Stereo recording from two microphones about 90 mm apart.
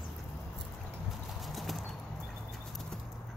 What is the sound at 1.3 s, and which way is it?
Clip-clop, centre (ahead or behind).